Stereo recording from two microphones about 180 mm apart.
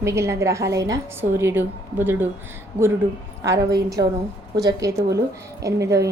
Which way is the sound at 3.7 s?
20° right (ahead or behind).